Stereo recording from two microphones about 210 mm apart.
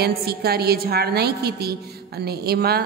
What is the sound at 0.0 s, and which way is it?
A woman's voice, 50° right (ahead or behind).